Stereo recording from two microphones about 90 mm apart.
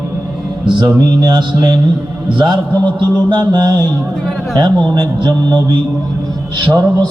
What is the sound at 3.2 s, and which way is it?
Speech, 55° right (ahead or behind).